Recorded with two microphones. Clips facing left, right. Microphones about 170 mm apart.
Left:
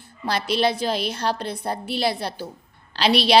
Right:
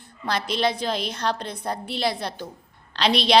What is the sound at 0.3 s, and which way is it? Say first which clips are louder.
A woman's voice: left 3 dB; 5° left (ahead or behind).